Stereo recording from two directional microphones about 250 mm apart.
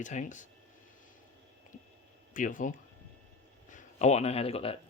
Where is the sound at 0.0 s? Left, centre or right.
Left.